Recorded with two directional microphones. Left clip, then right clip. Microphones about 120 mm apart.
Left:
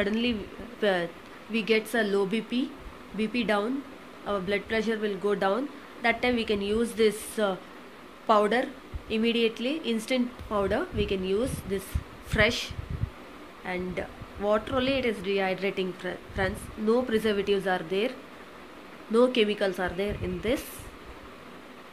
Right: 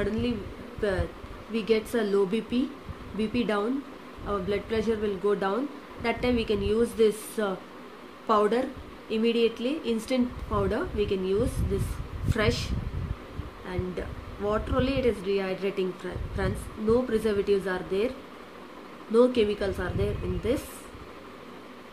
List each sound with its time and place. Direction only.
0.0 s speech: 50° left (ahead or behind)
1.5 s speech: 25° left (ahead or behind)
19.1 s a woman's voice: 30° left (ahead or behind)